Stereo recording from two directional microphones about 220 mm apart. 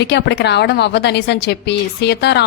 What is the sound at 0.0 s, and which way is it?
A woman's voice, 50° left (ahead or behind).